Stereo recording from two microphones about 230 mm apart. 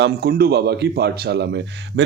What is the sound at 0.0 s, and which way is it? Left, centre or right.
Speech, right.